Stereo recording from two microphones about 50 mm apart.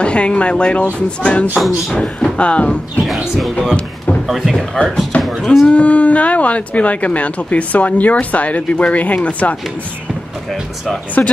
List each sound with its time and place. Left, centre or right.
0.0 s speech: left
1.6 s speech: centre
2.3 s speech: left
4.3 s speech: centre
5.7 s speech: left
11.2 s speech: left